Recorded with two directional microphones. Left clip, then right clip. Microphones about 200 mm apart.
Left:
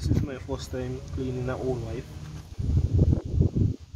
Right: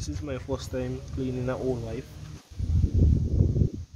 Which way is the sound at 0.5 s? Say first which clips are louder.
Right 2 dB; 30° right (ahead or behind).